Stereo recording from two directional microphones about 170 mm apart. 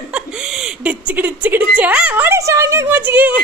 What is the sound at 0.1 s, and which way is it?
Speech, 5° right (ahead or behind).